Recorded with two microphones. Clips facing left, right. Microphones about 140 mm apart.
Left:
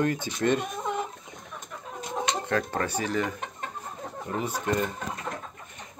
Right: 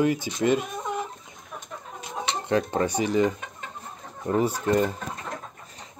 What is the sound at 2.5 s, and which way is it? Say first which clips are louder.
Speech: right 8 dB; 20° right (ahead or behind).